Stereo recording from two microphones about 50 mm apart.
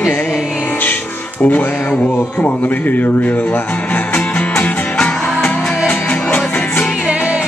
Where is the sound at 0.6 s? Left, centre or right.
Left.